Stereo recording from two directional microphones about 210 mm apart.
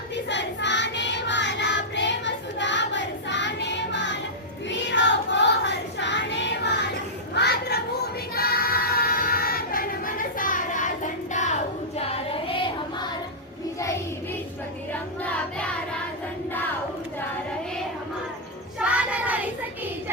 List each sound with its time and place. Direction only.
0.3 s child singing: 55° left (ahead or behind); by 13.1 s 25° left (ahead or behind)
13.7 s child singing: 15° left (ahead or behind)
15.2 s child singing: 5° left (ahead or behind)
18.8 s child singing: 5° right (ahead or behind)